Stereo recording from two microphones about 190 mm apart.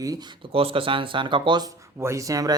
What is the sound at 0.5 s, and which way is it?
Speech, 30° right (ahead or behind).